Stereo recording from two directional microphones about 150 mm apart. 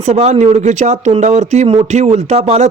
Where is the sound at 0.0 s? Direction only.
45° right (ahead or behind).